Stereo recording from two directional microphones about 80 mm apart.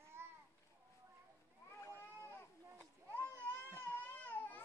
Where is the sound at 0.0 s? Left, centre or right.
Right.